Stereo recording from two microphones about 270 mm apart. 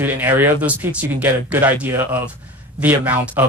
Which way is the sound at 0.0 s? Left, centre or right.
Centre.